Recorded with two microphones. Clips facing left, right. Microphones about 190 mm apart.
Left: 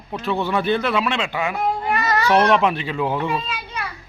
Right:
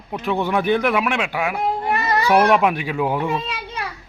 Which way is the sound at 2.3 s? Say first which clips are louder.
Right 1 dB; 10° right (ahead or behind).